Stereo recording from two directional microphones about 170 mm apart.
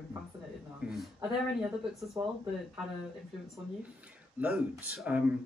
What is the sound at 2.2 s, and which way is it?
Speech, 20° right (ahead or behind).